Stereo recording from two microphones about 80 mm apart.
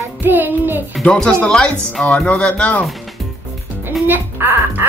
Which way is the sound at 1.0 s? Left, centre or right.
Centre.